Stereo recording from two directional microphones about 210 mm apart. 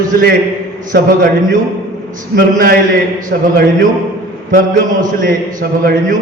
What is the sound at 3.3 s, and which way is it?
Speech, 55° right (ahead or behind).